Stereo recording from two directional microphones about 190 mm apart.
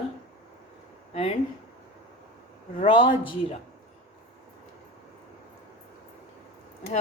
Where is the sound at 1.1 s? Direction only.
30° left (ahead or behind).